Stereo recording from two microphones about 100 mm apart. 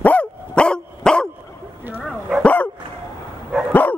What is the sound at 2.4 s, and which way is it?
Dog, 15° left (ahead or behind).